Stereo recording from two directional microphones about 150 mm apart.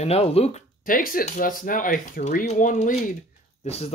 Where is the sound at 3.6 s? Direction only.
45° left (ahead or behind).